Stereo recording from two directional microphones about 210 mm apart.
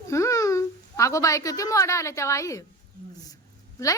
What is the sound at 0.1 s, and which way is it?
A woman's voice, 15° left (ahead or behind).